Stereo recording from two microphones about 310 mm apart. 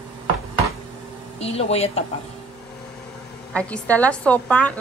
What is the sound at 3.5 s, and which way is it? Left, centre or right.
A woman's voice, centre.